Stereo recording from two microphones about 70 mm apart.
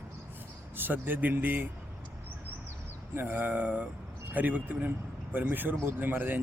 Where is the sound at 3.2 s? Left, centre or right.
Right.